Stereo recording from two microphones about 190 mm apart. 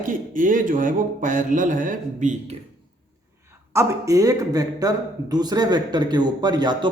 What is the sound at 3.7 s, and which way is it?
A man's voice, 15° right (ahead or behind).